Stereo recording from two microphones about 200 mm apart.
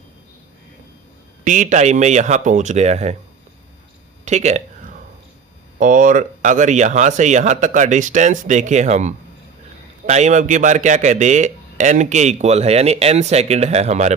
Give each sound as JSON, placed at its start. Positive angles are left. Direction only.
{"t": 1.5, "sound": "speech", "side_deg": -40}
{"t": 4.3, "sound": "a sound", "side_deg": -35}
{"t": 5.8, "sound": "speech", "side_deg": -40}